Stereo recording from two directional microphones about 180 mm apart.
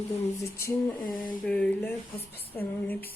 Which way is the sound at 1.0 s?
50° left (ahead or behind).